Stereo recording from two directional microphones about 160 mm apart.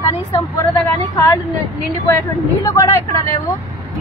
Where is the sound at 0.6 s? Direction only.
15° left (ahead or behind).